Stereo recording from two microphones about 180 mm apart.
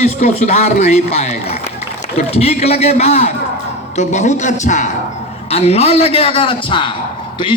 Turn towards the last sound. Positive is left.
turn(degrees=30)  # may be behind; listen again after turning